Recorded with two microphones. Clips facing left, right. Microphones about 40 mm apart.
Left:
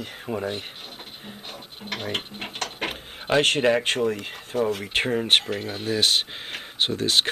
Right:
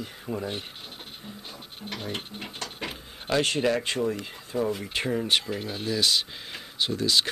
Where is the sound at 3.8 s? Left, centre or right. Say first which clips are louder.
Left 4 dB; left.